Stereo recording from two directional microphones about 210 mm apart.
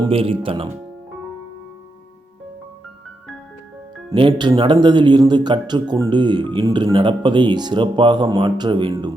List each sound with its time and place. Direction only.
0.1 s speech: 25° right (ahead or behind)
4.1 s speech: 25° right (ahead or behind)